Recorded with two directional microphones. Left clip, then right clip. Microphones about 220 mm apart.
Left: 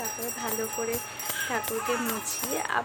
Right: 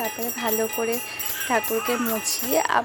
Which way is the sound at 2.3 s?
30° right (ahead or behind).